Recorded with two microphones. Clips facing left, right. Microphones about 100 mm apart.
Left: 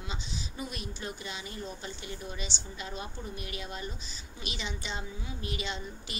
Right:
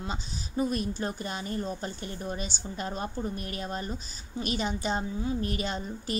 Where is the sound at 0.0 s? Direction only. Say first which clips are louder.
Right 4 dB; 40° right (ahead or behind).